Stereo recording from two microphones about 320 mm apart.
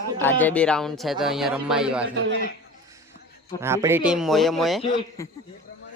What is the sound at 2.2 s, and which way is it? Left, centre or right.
Speech, right.